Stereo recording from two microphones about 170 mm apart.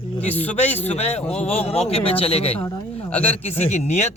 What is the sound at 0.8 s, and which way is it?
A man's voice, 35° left (ahead or behind).